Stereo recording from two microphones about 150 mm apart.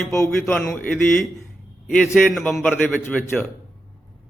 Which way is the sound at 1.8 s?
Centre (ahead or behind).